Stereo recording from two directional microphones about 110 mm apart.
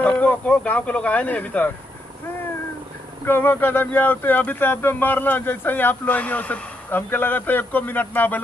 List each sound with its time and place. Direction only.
0.2 s speech: 10° left (ahead or behind)
3.3 s speech: 20° left (ahead or behind)